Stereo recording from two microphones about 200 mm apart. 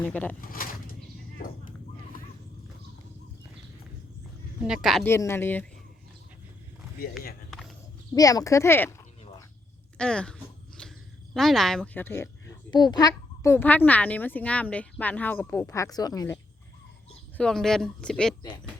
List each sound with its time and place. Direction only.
0.0 s a child's voice: 10° left (ahead or behind)
0.4 s a sound: 45° left (ahead or behind)
4.6 s speech: 5° right (ahead or behind)
5.0 s a child's voice: 15° left (ahead or behind)
8.1 s a child's voice: 20° left (ahead or behind)
10.0 s a sound: 5° left (ahead or behind)
11.3 s a child's voice: centre (ahead or behind); by 16.4 s 20° left (ahead or behind)
17.3 s speech: 5° left (ahead or behind)